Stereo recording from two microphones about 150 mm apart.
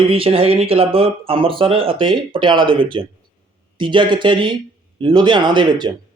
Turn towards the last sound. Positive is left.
turn(degrees=-30)  # may be behind; listen again after turning